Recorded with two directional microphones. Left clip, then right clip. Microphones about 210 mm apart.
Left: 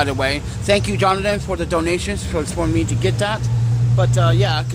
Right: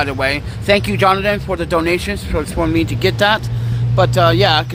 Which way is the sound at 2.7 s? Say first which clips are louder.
Right 8 dB; 20° right (ahead or behind).